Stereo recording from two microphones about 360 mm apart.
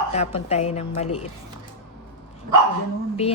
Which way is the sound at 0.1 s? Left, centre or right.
Centre.